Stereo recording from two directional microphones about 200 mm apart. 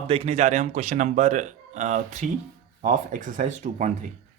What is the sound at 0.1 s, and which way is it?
A man's voice, 35° right (ahead or behind).